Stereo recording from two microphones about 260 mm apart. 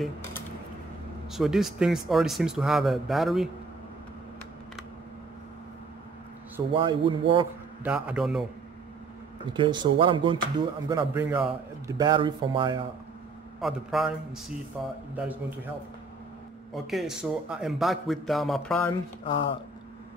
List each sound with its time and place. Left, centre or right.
0.0 s a sound: centre
1.3 s a man's voice: centre
6.7 s a man's voice: centre
7.8 s a man's voice: centre
9.5 s speech: centre
13.6 s a man's voice: centre
16.7 s a man's voice: centre
19.2 s speech: centre